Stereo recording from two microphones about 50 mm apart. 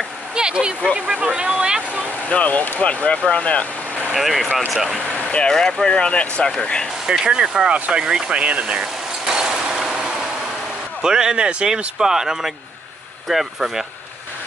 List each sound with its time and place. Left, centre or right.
0.3 s speech: centre
2.2 s speech: left
4.1 s speech: centre
5.5 s speech: centre
5.9 s speech: left
7.1 s speech: centre
8.0 s vehicle: centre
11.0 s speech: centre